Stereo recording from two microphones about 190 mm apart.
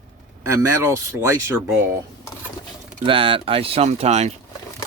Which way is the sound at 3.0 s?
30° right (ahead or behind).